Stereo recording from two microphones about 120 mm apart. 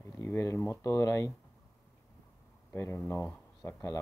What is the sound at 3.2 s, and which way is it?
Speech, 15° left (ahead or behind).